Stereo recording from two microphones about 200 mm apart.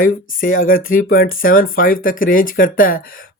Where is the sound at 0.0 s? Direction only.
45° left (ahead or behind).